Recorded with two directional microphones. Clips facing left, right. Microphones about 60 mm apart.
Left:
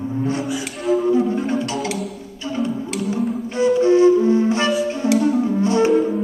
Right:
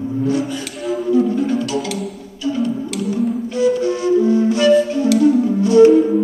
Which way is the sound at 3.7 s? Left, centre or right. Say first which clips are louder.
Left 3 dB; left.